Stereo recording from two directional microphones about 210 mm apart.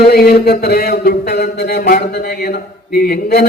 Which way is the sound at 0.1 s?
45° left (ahead or behind).